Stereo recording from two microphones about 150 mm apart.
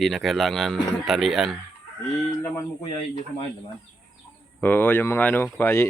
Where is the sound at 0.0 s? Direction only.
Centre (ahead or behind).